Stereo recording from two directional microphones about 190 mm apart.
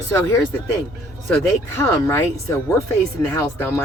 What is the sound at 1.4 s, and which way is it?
Speech, 15° left (ahead or behind).